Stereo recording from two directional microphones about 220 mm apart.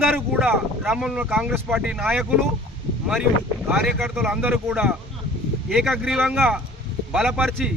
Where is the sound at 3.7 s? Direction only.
Centre (ahead or behind).